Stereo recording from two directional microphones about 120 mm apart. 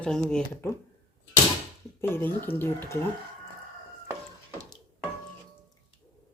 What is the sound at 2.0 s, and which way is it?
Speech, 15° left (ahead or behind).